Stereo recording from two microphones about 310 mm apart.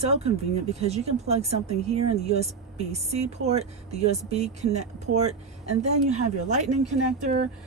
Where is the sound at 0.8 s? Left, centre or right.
Centre.